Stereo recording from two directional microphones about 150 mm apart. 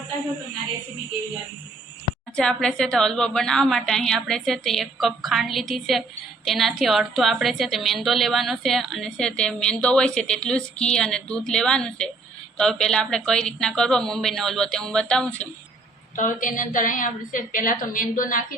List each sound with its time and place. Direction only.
2.3 s a woman's voice: 5° left (ahead or behind)
16.1 s a woman's voice: 60° left (ahead or behind)